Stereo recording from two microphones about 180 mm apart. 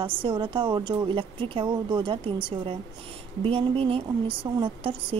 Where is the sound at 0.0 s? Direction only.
30° right (ahead or behind).